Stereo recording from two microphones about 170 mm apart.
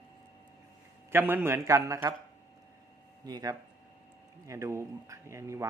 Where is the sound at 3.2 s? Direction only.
20° right (ahead or behind).